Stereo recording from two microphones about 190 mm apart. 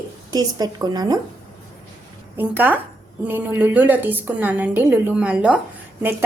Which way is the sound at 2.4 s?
10° right (ahead or behind).